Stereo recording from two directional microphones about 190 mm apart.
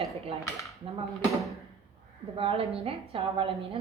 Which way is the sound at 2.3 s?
30° right (ahead or behind).